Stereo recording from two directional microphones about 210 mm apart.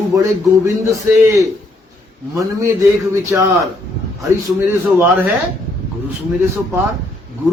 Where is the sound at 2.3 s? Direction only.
15° right (ahead or behind).